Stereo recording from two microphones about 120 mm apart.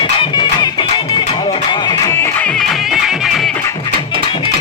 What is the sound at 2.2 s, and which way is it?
Music, 10° left (ahead or behind).